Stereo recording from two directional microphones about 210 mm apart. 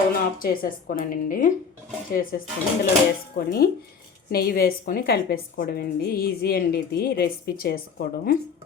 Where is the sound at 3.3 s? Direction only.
45° left (ahead or behind).